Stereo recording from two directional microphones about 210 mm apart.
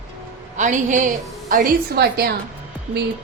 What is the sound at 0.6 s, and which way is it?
A woman's voice, 35° right (ahead or behind).